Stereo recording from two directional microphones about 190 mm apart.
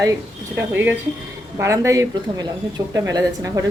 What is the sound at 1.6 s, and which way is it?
Speech, 15° right (ahead or behind).